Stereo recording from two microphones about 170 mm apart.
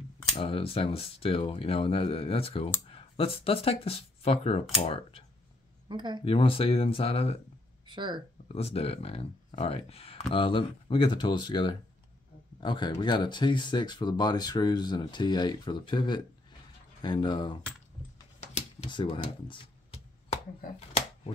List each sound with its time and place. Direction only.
0.4 s speech: 35° left (ahead or behind)
5.9 s speech: 25° right (ahead or behind)
6.2 s speech: 35° left (ahead or behind)
7.9 s speech: 25° right (ahead or behind)
8.5 s speech: 35° left (ahead or behind)
18.9 s speech: 30° left (ahead or behind)
19.4 s a sound: 30° left (ahead or behind)
20.6 s speech: 65° left (ahead or behind)